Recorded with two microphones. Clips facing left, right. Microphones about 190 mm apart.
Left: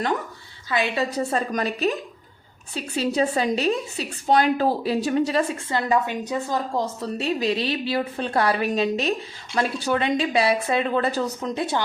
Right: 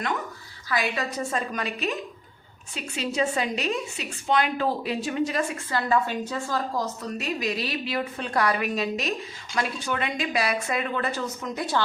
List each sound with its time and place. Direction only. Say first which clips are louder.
0.7 s a woman's voice: left 4 dB; 25° left (ahead or behind)
7.2 s speech: left 6 dB; 30° left (ahead or behind)